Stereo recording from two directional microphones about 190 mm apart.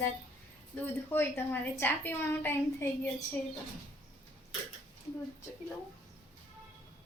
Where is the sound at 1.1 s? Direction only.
10° left (ahead or behind).